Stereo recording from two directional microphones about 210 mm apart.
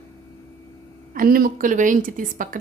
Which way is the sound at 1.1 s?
45° right (ahead or behind).